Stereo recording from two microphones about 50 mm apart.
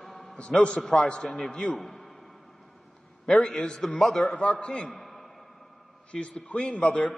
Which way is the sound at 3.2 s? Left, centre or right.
Centre.